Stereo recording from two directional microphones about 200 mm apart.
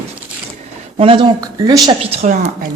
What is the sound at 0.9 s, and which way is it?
Speech, 25° right (ahead or behind).